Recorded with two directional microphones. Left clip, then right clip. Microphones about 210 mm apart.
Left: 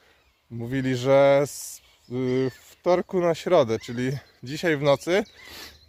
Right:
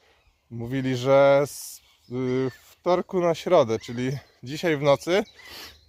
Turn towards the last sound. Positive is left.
turn(degrees=0)  # may be behind; listen again after turning